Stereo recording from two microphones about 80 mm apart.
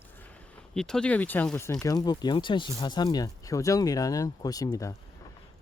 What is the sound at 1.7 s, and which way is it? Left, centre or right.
Speech, left.